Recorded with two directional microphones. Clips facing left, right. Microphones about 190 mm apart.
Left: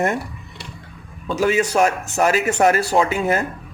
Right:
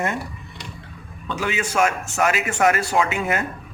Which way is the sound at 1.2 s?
40° left (ahead or behind).